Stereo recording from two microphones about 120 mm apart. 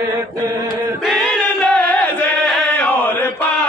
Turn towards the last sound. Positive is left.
turn(degrees=10)  # may be behind; listen again after turning